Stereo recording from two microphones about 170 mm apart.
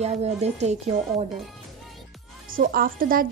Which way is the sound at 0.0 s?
40° right (ahead or behind).